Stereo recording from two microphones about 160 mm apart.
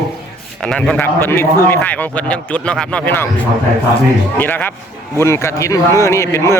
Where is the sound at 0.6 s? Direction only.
5° left (ahead or behind).